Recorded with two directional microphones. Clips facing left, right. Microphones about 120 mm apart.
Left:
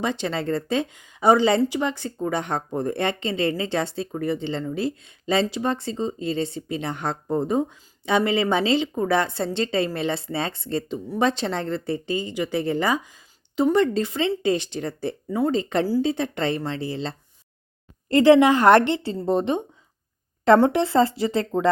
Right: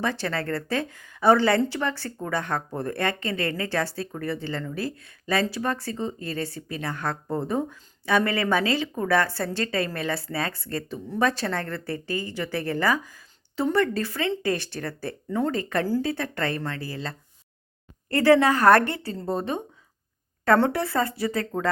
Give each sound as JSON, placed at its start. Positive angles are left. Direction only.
{"t": 0.0, "sound": "speech", "side_deg": 20}